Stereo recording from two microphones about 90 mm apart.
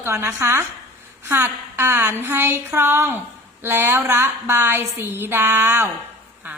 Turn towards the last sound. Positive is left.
turn(degrees=-25)  # may be behind; listen again after turning